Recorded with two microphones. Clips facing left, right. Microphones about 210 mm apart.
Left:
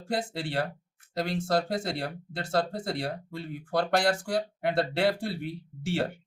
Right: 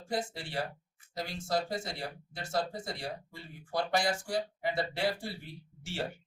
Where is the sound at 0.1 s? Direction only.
65° left (ahead or behind).